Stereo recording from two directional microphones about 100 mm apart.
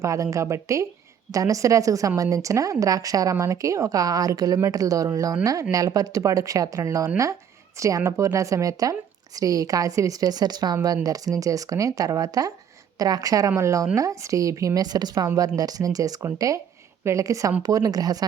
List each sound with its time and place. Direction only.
0.0 s a woman's voice: 30° right (ahead or behind)